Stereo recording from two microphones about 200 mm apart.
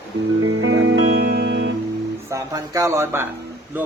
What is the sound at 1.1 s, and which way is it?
Music, 50° right (ahead or behind).